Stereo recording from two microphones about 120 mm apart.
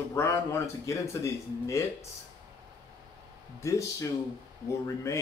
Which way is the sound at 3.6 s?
25° left (ahead or behind).